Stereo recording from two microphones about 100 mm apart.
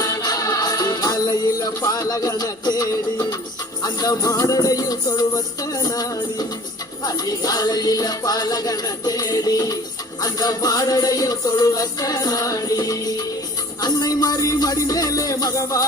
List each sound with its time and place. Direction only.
0.0 s music: 40° left (ahead or behind)